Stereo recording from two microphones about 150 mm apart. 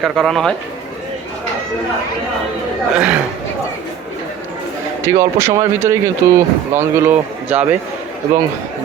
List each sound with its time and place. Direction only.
0.0 s a man's voice: centre (ahead or behind)
2.9 s speech: 10° right (ahead or behind)
5.0 s speech: 20° right (ahead or behind)